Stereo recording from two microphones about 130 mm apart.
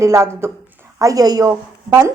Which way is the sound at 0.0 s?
20° right (ahead or behind).